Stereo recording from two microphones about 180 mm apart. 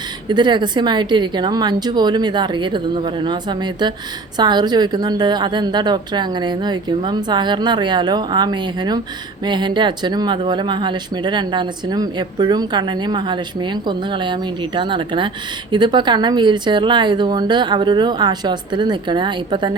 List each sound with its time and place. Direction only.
0.3 s speech: 25° right (ahead or behind)